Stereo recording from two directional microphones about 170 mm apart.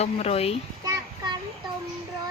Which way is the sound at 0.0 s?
35° left (ahead or behind).